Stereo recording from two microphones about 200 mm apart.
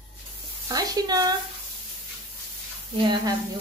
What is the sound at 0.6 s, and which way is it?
Speech, 20° right (ahead or behind).